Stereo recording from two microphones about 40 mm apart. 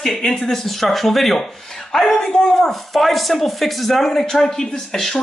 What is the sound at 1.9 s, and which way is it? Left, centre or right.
Speech, centre.